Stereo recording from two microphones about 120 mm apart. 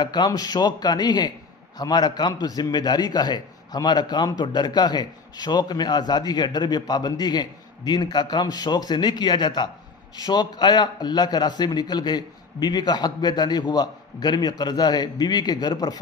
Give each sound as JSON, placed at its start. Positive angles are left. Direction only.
{"t": 0.0, "sound": "a man's voice", "side_deg": 35}